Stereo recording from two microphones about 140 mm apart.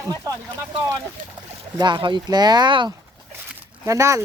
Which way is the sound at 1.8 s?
35° right (ahead or behind).